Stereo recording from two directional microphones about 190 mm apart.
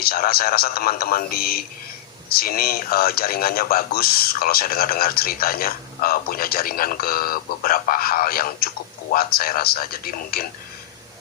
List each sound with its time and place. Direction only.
0.0 s speech: 50° left (ahead or behind)